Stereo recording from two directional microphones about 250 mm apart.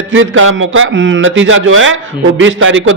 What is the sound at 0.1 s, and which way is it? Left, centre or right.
A man's voice, right.